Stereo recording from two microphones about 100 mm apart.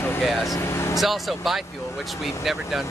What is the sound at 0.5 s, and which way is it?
Speech, 25° left (ahead or behind).